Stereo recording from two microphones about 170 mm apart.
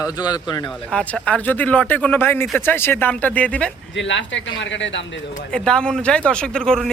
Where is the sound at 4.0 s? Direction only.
90° left.